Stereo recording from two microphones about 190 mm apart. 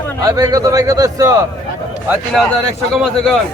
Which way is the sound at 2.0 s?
Centre (ahead or behind).